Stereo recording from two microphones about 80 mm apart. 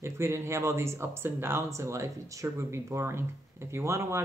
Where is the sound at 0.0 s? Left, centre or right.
Right.